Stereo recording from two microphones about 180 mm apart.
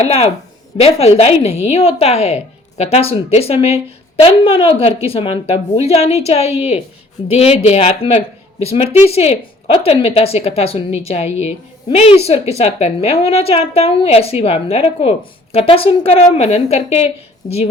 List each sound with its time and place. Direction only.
0.8 s a woman's voice: 35° left (ahead or behind)